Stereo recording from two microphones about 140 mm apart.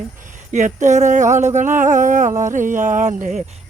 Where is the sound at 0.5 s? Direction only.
60° right (ahead or behind).